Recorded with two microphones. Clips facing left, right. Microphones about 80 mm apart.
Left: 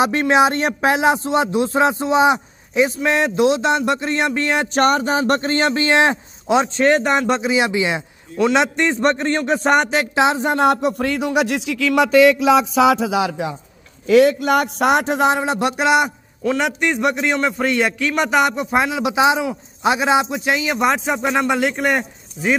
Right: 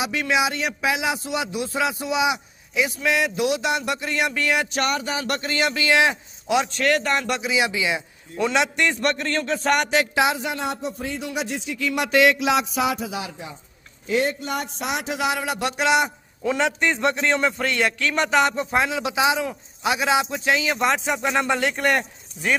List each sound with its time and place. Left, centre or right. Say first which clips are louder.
0.0 s a man's voice: left 8 dB; left
10.6 s a man's voice: left 11 dB; left
16.5 s a man's voice: left 2 dB; centre